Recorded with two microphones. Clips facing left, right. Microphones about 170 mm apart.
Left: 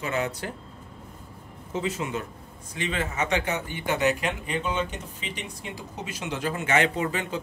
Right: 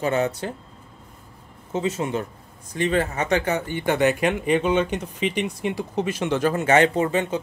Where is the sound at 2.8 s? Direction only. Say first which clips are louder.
Right 6 dB; 40° right (ahead or behind).